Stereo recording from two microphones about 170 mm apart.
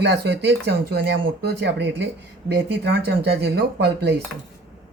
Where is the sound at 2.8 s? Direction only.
75° right (ahead or behind).